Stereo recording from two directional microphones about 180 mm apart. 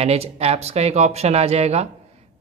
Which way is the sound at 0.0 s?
35° right (ahead or behind).